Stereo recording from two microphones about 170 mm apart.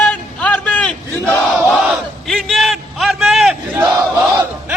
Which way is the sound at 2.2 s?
Centre (ahead or behind).